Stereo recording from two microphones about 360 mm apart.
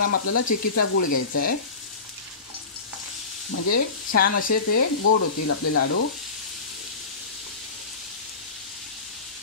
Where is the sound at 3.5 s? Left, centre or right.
Left.